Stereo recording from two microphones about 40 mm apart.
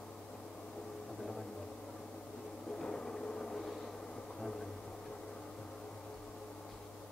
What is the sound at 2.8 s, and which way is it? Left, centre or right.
Vehicle, centre.